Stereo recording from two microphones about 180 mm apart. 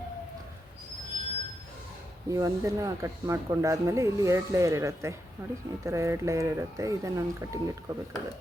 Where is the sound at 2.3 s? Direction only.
15° right (ahead or behind).